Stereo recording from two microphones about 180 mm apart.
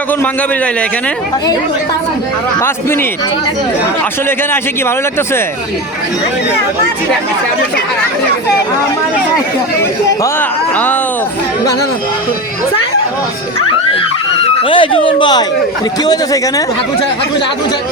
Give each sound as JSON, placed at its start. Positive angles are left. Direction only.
{"t": 2.6, "sound": "a man's voice", "side_deg": 15}
{"t": 14.6, "sound": "speech", "side_deg": 30}